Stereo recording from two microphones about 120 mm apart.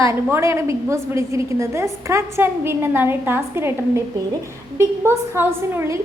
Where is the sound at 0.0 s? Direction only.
25° right (ahead or behind).